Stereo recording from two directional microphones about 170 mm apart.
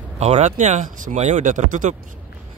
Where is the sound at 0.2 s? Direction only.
40° right (ahead or behind).